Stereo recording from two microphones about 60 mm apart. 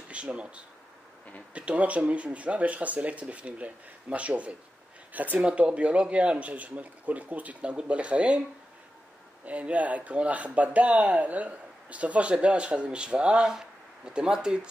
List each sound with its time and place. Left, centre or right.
0.1 s speech: centre
9.4 s speech: right